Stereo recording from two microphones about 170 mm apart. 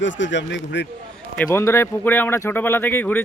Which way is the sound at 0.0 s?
90° left.